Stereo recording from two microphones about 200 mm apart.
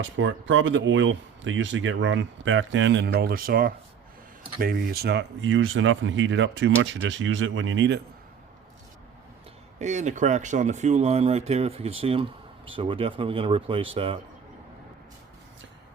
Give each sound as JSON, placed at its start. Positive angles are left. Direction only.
{"t": 0.0, "sound": "speech", "side_deg": -70}
{"t": 9.7, "sound": "speech", "side_deg": -35}